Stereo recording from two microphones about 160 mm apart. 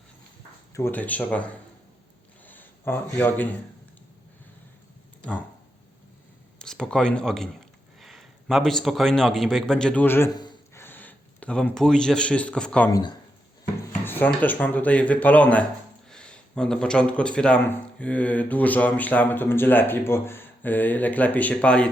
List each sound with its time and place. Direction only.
0.7 s speech: 15° left (ahead or behind)
2.5 s speech: 10° left (ahead or behind)
6.6 s a man's voice: 5° left (ahead or behind)
10.3 s a sound: 25° left (ahead or behind)
10.8 s a man's voice: 10° left (ahead or behind)
12.9 s speech: 30° left (ahead or behind)
14.0 s speech: 10° left (ahead or behind)